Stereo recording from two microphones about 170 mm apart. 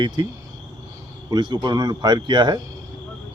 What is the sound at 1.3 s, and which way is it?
Speech, 25° right (ahead or behind).